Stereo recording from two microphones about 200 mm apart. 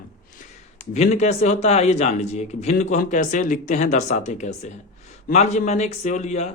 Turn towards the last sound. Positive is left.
turn(degrees=35)  # may be behind; listen again after turning